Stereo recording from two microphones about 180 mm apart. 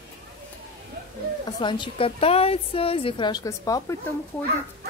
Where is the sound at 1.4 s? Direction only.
25° left (ahead or behind).